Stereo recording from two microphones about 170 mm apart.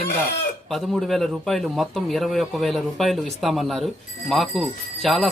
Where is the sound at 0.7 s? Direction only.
Centre (ahead or behind).